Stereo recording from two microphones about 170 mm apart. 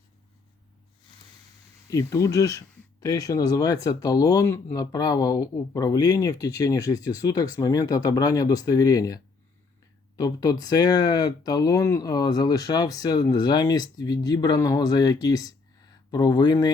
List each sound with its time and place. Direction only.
1.9 s speech: 20° left (ahead or behind)